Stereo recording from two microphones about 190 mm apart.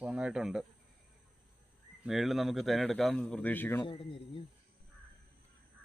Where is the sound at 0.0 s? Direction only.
5° right (ahead or behind).